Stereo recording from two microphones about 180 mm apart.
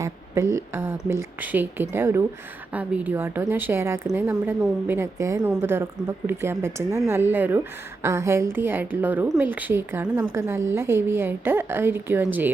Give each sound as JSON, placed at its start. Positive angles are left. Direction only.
{"t": 0.0, "sound": "a woman's voice", "side_deg": -15}